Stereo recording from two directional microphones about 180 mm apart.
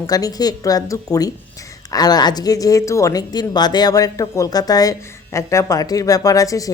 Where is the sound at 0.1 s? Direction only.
20° left (ahead or behind).